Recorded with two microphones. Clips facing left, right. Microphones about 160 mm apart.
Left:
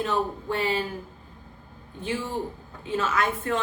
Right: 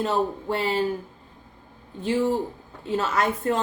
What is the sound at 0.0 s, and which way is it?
Speech, 35° right (ahead or behind).